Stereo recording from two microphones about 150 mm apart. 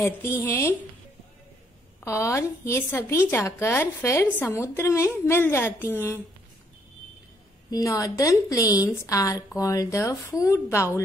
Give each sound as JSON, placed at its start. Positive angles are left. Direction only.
{"t": 0.0, "sound": "a woman's voice", "side_deg": 15}
{"t": 2.0, "sound": "a woman's voice", "side_deg": 20}
{"t": 7.7, "sound": "speech", "side_deg": 25}